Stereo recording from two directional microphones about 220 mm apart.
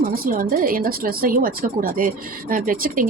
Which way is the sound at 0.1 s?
40° right (ahead or behind).